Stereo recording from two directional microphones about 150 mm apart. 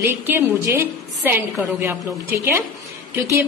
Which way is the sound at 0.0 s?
20° right (ahead or behind).